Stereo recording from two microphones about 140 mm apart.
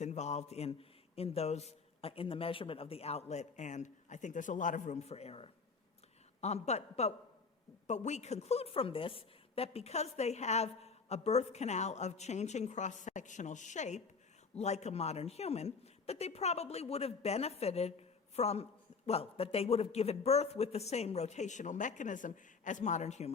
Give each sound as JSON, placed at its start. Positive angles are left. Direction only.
{"t": 0.0, "sound": "a man's voice", "side_deg": 55}